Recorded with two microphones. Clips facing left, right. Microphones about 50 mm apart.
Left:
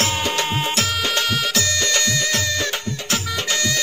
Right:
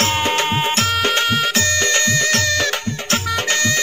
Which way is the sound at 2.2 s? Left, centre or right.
Right.